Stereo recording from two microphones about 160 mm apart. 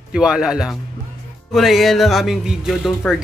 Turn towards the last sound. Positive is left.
turn(degrees=0)  # may be behind; listen again after turning